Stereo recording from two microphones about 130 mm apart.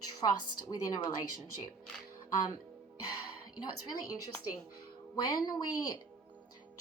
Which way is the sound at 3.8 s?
30° left (ahead or behind).